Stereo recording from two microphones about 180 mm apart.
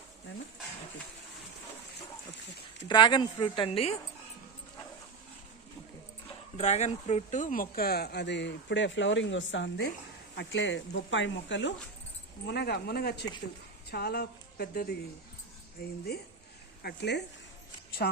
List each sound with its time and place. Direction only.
2.8 s speech: 25° left (ahead or behind)
6.6 s speech: 40° left (ahead or behind); by 11.7 s 90° left
12.5 s speech: 65° left (ahead or behind)